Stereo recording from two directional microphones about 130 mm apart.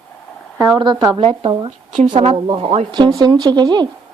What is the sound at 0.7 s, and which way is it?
Speech, 35° right (ahead or behind).